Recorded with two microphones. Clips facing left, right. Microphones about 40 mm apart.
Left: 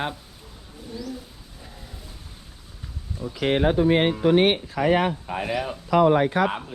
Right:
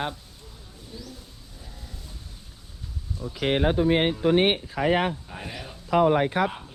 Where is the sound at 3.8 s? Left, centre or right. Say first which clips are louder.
Left 2 dB; left.